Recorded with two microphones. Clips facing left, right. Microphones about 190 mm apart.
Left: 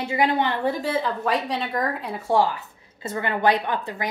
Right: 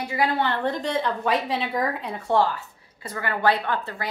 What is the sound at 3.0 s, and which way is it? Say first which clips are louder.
A woman's voice: left 2 dB; 25° left (ahead or behind).